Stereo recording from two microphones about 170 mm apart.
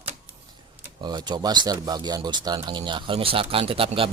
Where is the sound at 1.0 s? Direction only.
25° right (ahead or behind).